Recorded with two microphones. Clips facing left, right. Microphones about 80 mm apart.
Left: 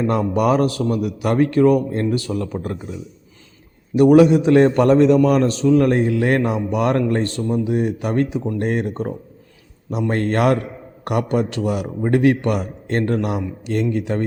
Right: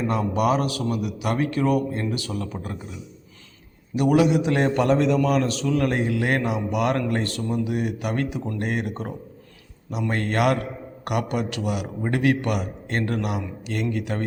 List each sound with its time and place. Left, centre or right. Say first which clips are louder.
0.1 s a man's voice: left 3 dB; left
3.9 s a man's voice: left 8 dB; left